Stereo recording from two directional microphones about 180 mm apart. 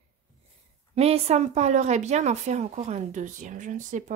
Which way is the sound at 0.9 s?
35° right (ahead or behind).